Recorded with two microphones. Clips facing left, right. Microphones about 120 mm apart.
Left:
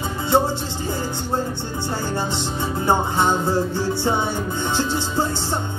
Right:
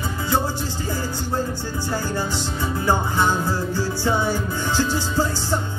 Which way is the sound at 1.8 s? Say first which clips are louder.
Even; 25° left (ahead or behind).